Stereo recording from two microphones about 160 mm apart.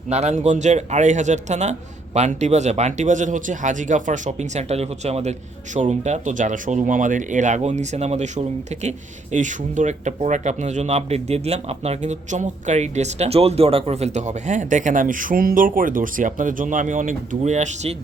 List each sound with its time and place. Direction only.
0.1 s speech: 45° right (ahead or behind)